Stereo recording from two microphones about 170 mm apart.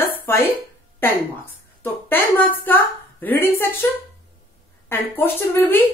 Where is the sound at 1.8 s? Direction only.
10° left (ahead or behind).